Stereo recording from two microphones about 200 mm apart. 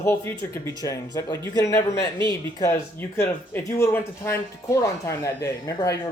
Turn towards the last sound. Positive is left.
turn(degrees=15)  # may be behind; listen again after turning